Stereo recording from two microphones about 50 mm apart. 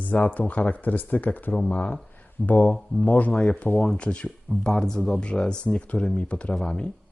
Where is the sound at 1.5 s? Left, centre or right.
Left.